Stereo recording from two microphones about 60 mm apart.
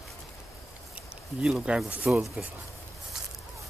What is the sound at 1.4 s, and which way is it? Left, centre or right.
Speech, centre.